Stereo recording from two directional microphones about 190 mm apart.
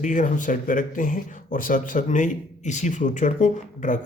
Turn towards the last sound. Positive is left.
turn(degrees=40)  # may be behind; listen again after turning